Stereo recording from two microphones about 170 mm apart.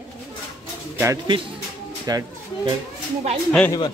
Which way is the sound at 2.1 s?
25° right (ahead or behind).